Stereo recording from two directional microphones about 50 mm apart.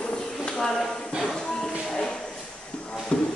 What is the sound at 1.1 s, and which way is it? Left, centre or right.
Music, centre.